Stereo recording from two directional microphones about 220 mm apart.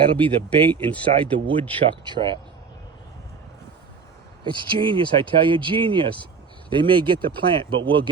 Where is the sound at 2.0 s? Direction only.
20° right (ahead or behind).